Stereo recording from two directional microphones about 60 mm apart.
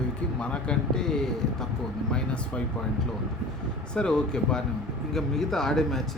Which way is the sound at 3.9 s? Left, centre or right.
Centre.